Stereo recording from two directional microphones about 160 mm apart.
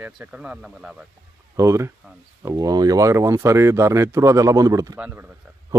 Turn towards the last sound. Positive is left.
turn(degrees=-15)  # may be behind; listen again after turning